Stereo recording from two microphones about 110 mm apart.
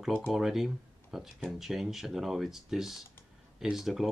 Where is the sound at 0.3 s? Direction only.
Centre (ahead or behind).